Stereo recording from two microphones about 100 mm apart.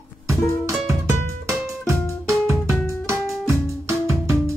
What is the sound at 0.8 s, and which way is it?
Music, 30° right (ahead or behind).